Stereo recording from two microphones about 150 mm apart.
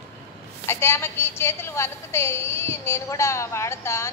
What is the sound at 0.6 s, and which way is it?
A woman's voice, 15° left (ahead or behind).